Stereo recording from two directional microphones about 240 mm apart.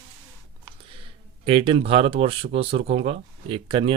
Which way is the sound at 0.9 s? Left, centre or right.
Right.